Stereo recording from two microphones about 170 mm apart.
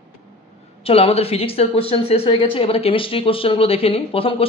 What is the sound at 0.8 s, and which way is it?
Speech, 35° left (ahead or behind).